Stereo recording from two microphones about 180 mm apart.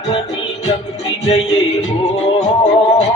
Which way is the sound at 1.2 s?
40° left (ahead or behind).